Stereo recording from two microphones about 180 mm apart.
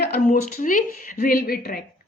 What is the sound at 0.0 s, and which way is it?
Speech, 55° left (ahead or behind).